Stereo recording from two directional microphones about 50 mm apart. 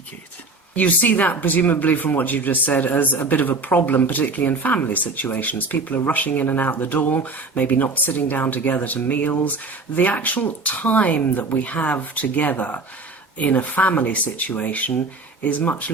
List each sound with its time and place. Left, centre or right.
0.8 s speech: left